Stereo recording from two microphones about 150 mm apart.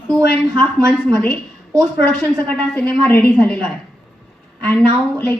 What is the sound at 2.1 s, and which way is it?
A woman's voice, 10° left (ahead or behind).